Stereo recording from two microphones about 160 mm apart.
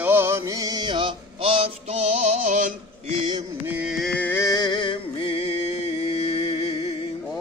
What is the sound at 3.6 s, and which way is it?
Music, 10° right (ahead or behind).